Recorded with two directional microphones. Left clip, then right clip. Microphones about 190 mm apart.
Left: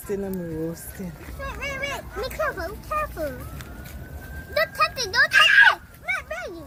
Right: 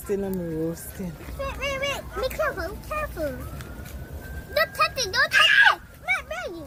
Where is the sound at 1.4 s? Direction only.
55° right (ahead or behind).